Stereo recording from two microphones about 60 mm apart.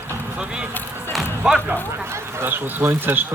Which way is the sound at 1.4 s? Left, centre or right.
Centre.